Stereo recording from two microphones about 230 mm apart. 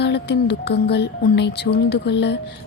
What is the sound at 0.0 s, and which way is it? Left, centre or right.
Music, left.